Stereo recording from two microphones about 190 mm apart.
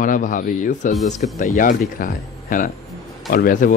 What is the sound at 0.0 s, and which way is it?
Speech, 45° left (ahead or behind).